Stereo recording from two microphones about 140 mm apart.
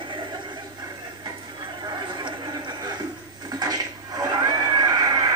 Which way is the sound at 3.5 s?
25° right (ahead or behind).